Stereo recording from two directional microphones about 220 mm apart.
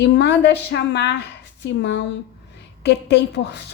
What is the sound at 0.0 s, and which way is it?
Speech, 50° left (ahead or behind).